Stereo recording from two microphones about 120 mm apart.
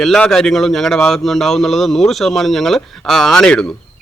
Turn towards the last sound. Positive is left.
turn(degrees=5)  # may be behind; listen again after turning